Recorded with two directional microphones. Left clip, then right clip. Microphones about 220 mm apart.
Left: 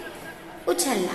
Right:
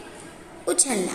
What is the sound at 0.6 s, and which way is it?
Speech, 30° right (ahead or behind).